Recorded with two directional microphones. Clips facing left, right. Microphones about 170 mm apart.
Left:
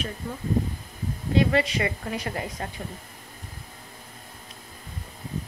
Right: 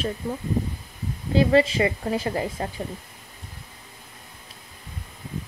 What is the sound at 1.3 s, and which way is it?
Speech, 30° right (ahead or behind).